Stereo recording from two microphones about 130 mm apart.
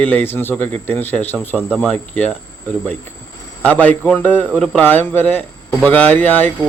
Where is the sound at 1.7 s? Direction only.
Centre (ahead or behind).